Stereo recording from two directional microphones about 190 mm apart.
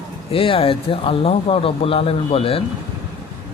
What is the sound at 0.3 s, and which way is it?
Speech, 30° left (ahead or behind).